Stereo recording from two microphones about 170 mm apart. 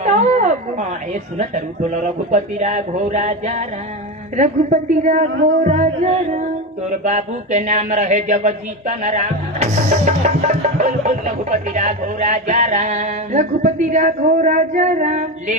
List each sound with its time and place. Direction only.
0.0 s a man's voice: 45° right (ahead or behind)